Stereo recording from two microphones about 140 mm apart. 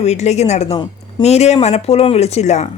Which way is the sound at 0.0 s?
50° left (ahead or behind).